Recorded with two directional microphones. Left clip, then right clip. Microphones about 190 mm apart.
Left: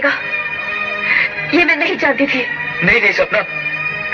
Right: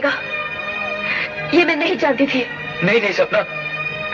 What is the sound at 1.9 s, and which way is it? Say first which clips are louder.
A woman's voice: left 2 dB; 35° right (ahead or behind).